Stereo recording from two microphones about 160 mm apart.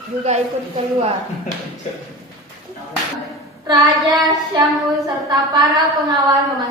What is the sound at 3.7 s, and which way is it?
Child singing, 25° right (ahead or behind).